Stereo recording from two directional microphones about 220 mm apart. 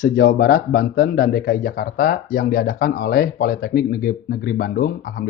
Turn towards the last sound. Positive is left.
turn(degrees=45)  # may be behind; listen again after turning